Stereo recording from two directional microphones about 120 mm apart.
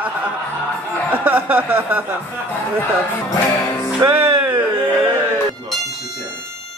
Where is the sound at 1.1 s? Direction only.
15° right (ahead or behind).